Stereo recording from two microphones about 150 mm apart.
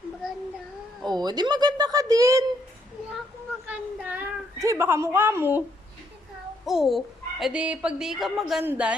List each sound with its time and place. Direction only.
1.0 s speech: 25° right (ahead or behind)
3.7 s a woman's voice: 10° right (ahead or behind)
6.7 s a woman's voice: centre (ahead or behind)